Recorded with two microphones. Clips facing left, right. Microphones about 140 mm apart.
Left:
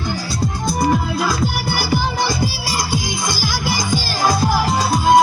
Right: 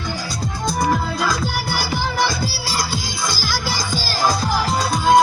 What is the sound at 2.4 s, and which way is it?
Music, 15° left (ahead or behind).